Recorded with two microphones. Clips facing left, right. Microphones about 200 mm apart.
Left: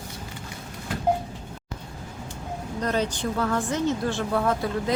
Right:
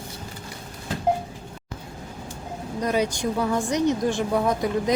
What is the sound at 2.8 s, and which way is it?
A woman's voice, 10° right (ahead or behind).